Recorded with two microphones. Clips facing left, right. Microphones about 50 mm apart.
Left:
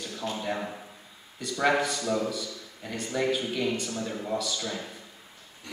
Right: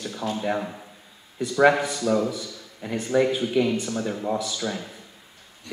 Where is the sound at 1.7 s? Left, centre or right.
Centre.